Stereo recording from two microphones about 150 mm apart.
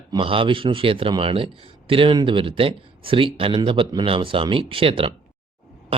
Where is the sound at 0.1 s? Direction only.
35° right (ahead or behind).